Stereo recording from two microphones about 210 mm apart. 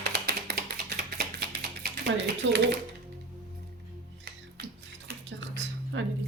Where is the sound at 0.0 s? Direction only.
50° right (ahead or behind).